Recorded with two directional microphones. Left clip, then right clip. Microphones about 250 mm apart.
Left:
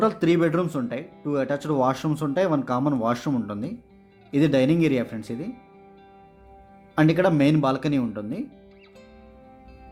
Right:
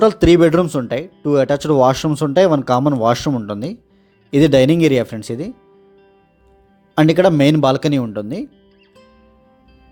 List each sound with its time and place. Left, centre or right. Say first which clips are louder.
0.0 s speech: right 10 dB; right
6.9 s speech: right 8 dB; right